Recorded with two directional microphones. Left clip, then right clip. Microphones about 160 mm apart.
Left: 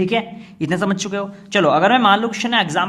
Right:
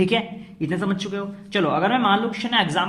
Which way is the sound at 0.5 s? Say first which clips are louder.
Left 5 dB; 45° left (ahead or behind).